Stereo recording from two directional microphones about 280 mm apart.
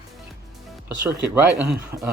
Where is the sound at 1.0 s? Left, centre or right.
Right.